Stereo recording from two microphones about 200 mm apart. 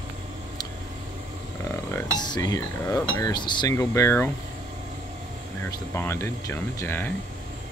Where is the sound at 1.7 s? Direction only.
15° left (ahead or behind).